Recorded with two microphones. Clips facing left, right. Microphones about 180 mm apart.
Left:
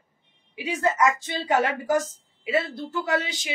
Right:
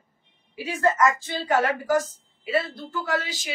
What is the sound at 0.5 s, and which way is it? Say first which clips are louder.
Speech: right 1 dB; 15° left (ahead or behind).